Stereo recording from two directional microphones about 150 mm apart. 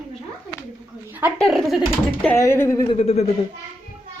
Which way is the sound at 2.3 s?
15° left (ahead or behind).